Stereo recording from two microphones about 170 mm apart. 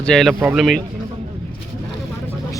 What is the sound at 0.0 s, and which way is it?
Speech, 5° left (ahead or behind).